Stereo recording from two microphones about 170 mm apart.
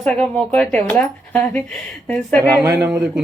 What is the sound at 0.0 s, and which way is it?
A woman's voice, 5° left (ahead or behind).